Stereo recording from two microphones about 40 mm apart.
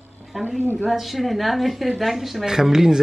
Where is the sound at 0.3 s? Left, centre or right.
Centre.